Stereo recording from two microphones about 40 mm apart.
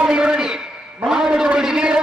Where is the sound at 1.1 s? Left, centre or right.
Centre.